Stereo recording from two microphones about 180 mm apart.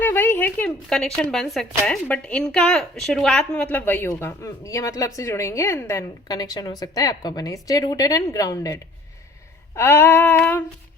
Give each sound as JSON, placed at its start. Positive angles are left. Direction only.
{"t": 0.0, "sound": "a woman's voice", "side_deg": 10}
{"t": 9.7, "sound": "female singing", "side_deg": 10}